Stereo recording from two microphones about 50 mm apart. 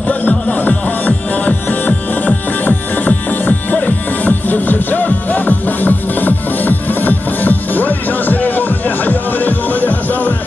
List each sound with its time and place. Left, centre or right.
0.1 s music: left